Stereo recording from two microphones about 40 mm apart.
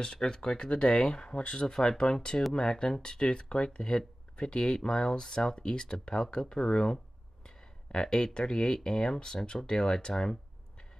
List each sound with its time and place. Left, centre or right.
0.0 s speech: centre
0.7 s speech: left
1.7 s speech: centre